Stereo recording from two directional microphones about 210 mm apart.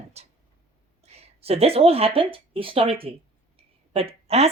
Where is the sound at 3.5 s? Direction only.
25° right (ahead or behind).